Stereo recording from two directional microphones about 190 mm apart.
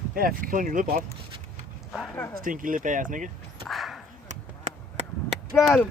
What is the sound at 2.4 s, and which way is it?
Speech, 45° right (ahead or behind).